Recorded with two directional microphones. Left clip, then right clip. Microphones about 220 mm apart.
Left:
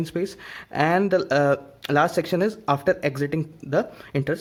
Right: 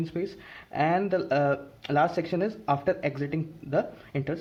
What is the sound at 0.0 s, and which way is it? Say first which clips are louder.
Speech: left 5 dB; 40° left (ahead or behind).